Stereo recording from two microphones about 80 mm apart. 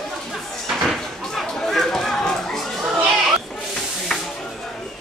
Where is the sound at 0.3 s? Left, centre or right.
Centre.